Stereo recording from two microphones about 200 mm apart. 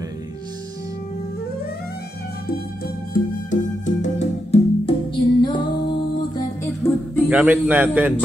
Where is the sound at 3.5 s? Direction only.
35° left (ahead or behind).